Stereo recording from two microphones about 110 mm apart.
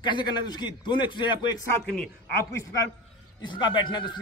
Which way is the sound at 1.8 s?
5° left (ahead or behind).